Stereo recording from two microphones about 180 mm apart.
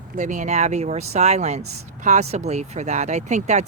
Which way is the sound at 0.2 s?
45° right (ahead or behind).